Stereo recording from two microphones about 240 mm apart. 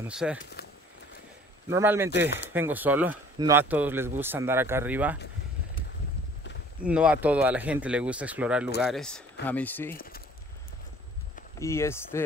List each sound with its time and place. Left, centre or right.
0.1 s speech: centre
0.4 s speech: left
1.7 s speech: centre
6.8 s speech: centre
9.9 s a sound: left
11.6 s speech: centre